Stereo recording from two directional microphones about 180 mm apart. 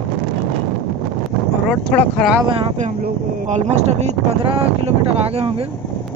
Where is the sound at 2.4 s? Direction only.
30° right (ahead or behind).